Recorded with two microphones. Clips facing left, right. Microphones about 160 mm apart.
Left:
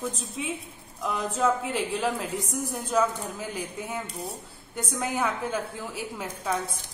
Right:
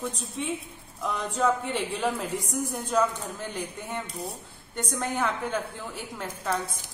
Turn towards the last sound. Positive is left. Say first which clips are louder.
# even
turn(degrees=10)  # may be behind; listen again after turning